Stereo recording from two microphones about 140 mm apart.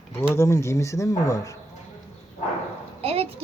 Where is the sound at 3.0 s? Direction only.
45° right (ahead or behind).